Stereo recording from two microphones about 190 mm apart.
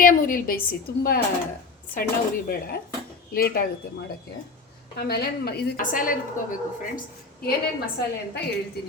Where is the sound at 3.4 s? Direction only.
50° left (ahead or behind).